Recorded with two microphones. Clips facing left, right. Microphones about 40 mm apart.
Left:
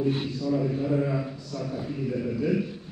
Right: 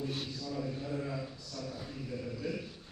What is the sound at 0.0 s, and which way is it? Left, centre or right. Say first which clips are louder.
A man's voice: left 11 dB; left.